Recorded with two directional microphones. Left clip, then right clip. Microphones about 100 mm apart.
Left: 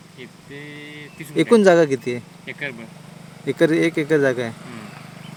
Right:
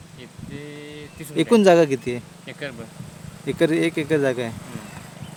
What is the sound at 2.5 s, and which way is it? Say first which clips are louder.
Speech: left 6 dB; 45° right (ahead or behind).